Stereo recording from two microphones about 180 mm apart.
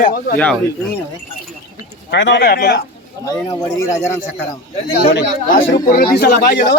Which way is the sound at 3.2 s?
15° left (ahead or behind).